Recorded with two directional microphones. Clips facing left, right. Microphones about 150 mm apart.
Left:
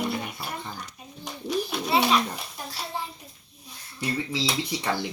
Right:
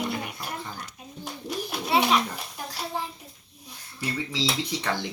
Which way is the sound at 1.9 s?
10° right (ahead or behind).